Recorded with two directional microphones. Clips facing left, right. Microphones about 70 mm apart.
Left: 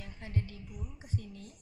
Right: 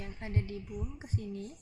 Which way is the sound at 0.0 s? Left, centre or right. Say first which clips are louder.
Right 2 dB; centre.